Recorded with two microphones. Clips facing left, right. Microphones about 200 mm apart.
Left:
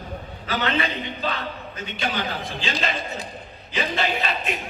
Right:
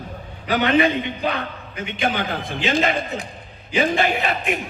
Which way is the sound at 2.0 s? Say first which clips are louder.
Right 4 dB; 50° right (ahead or behind).